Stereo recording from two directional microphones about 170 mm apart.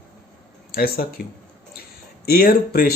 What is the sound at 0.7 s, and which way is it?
Speech, 60° left (ahead or behind).